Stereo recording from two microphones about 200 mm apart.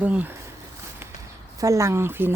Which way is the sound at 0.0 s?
10° right (ahead or behind).